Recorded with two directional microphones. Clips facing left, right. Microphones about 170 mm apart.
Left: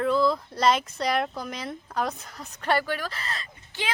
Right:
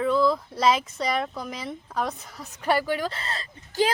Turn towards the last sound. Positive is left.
turn(degrees=-30)  # may be behind; listen again after turning